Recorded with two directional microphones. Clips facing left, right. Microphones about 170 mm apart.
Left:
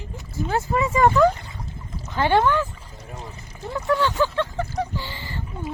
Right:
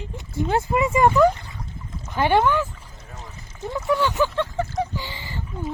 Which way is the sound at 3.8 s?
15° right (ahead or behind).